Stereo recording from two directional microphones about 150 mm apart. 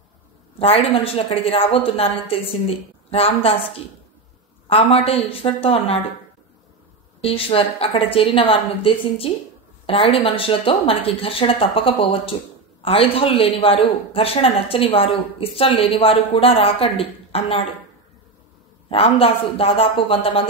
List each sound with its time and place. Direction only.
0.6 s a woman's voice: 40° left (ahead or behind)
4.6 s a woman's voice: 40° left (ahead or behind)
7.2 s a woman's voice: 40° left (ahead or behind)
18.9 s a woman's voice: 40° left (ahead or behind)